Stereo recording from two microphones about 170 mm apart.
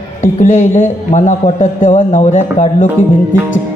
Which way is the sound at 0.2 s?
50° left (ahead or behind).